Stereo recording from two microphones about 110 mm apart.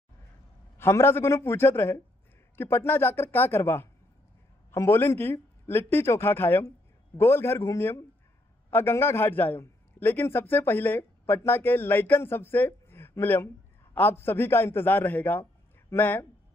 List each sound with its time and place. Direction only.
0.7 s a man's voice: 20° left (ahead or behind)